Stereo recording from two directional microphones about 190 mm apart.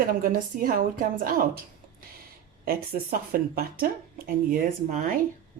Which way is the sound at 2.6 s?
55° right (ahead or behind).